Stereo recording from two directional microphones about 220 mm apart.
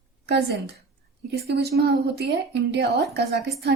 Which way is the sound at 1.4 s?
50° right (ahead or behind).